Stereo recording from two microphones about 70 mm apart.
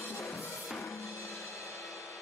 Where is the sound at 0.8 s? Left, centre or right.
Left.